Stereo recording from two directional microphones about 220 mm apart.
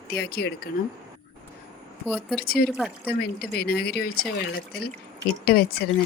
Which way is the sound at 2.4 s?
45° left (ahead or behind).